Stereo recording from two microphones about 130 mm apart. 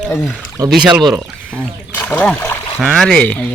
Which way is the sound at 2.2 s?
10° left (ahead or behind).